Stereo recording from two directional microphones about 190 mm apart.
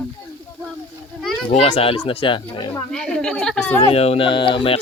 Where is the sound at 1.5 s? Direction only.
35° left (ahead or behind).